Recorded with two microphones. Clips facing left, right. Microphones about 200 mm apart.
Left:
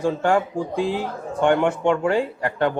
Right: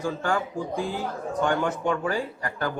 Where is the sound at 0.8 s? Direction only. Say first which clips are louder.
Left 7 dB; 75° left (ahead or behind).